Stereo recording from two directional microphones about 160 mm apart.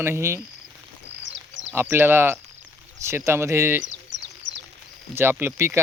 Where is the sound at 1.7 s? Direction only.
15° right (ahead or behind).